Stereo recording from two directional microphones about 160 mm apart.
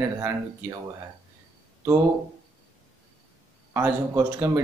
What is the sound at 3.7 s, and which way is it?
Speech, 15° right (ahead or behind).